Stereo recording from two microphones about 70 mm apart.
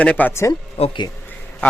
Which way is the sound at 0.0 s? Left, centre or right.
Left.